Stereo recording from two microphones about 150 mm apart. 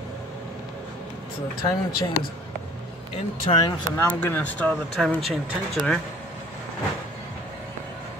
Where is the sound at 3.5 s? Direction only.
40° left (ahead or behind).